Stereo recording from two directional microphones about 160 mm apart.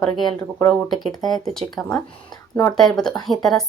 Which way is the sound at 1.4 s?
Centre (ahead or behind).